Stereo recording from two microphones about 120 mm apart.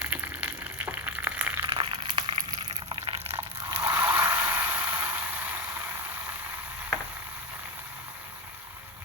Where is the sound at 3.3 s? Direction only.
20° right (ahead or behind).